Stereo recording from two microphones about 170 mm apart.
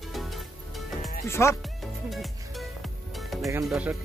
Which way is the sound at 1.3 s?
15° left (ahead or behind).